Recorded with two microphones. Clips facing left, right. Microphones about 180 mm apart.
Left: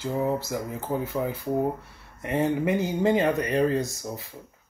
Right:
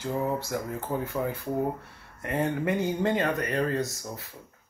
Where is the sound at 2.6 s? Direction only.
10° left (ahead or behind).